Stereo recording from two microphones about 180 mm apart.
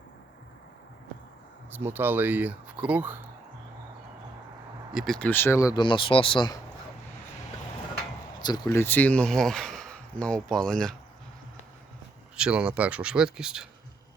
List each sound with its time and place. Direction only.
1.7 s speech: 10° right (ahead or behind)
4.9 s speech: 5° left (ahead or behind); by 6.6 s 25° left (ahead or behind)
8.4 s speech: 25° left (ahead or behind); by 10.9 s 5° left (ahead or behind)
12.4 s speech: 5° right (ahead or behind)